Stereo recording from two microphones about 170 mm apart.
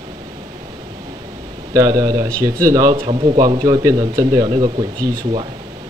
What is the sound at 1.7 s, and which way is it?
Speech, 20° right (ahead or behind).